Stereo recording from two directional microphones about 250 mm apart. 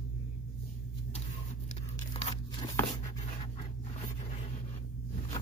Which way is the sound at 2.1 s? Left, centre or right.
Left.